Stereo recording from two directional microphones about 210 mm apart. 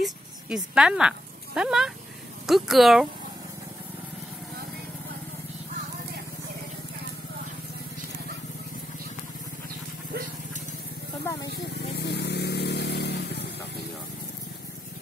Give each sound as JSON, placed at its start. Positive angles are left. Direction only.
{"t": 0.0, "sound": "speech", "side_deg": 0}
{"t": 11.5, "sound": "vehicle", "side_deg": 50}